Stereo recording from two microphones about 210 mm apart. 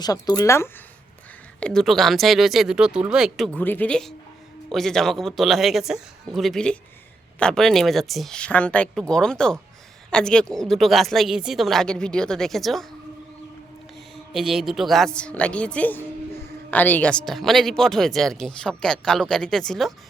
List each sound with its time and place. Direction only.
0.0 s a woman's voice: 15° left (ahead or behind); by 12.9 s centre (ahead or behind)
14.3 s a woman's voice: centre (ahead or behind)